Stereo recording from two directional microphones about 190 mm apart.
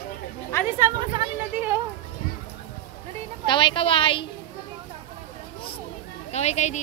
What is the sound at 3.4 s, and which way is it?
Speech, 25° left (ahead or behind).